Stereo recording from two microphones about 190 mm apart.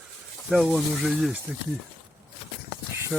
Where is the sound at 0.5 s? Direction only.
Centre (ahead or behind).